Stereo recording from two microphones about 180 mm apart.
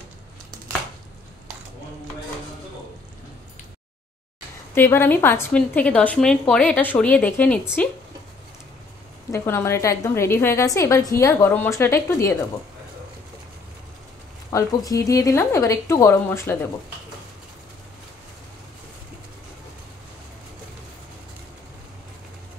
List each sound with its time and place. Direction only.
4.7 s a woman's voice: 15° left (ahead or behind)
9.3 s a woman's voice: 15° left (ahead or behind)
14.5 s a woman's voice: 20° left (ahead or behind)